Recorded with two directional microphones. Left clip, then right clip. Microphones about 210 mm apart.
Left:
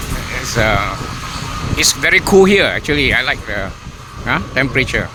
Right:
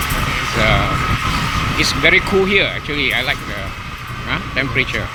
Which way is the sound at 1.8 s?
35° left (ahead or behind).